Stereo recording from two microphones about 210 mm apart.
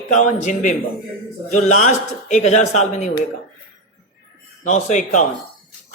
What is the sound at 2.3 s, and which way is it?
Speech, 35° left (ahead or behind).